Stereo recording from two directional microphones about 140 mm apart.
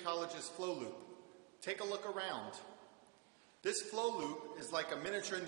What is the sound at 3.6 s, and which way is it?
Speech, 20° right (ahead or behind).